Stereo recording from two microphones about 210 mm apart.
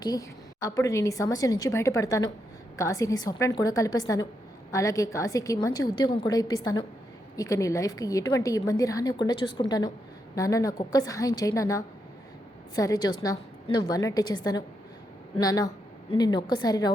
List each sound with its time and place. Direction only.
0.0 s a woman's voice: 15° left (ahead or behind)